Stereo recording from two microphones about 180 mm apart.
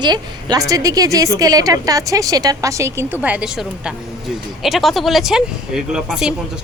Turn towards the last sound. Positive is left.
turn(degrees=-5)  # may be behind; listen again after turning